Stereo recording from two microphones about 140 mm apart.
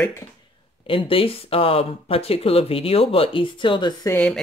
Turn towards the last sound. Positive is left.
turn(degrees=10)  # may be behind; listen again after turning